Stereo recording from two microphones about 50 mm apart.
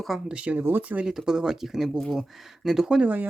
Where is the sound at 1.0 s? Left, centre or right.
Centre.